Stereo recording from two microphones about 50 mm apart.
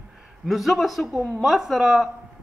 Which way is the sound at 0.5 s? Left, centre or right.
Centre.